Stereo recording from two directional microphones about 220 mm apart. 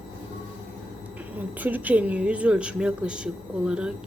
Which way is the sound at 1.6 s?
10° right (ahead or behind).